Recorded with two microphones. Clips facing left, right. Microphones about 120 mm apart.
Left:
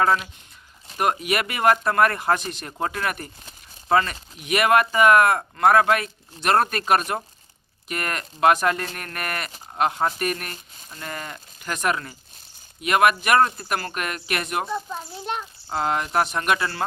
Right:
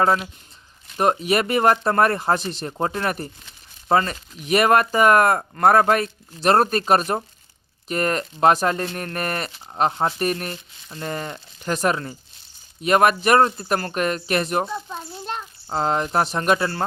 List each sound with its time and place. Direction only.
0.0 s speech: 30° right (ahead or behind)
15.2 s a sound: 15° left (ahead or behind)
15.7 s speech: 35° right (ahead or behind)